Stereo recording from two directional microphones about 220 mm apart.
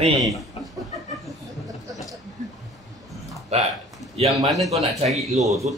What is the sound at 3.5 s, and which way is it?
Speech, 30° right (ahead or behind).